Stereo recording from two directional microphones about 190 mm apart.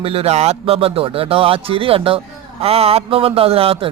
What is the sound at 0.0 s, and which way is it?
Speech, 30° right (ahead or behind).